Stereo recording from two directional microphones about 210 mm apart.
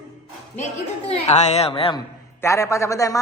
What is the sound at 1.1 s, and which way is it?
A woman's voice, 30° left (ahead or behind).